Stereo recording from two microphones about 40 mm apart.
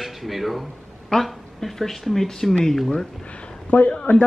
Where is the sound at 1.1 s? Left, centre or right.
Centre.